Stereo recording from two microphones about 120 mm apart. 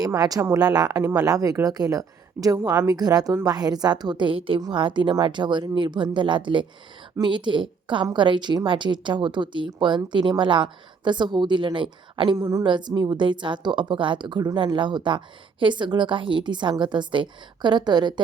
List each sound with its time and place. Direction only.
0.0 s a woman's voice: 30° right (ahead or behind)
12.4 s a woman's voice: 30° right (ahead or behind)